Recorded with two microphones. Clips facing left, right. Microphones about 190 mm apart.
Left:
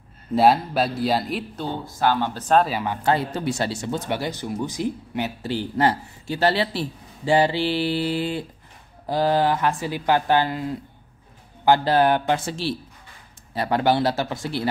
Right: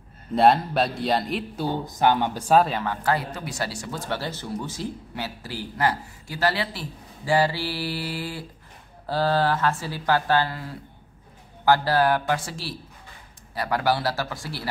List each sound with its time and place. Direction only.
0.3 s a man's voice: 5° left (ahead or behind)
1.6 s speech: 15° right (ahead or behind)
2.8 s speech: 20° left (ahead or behind)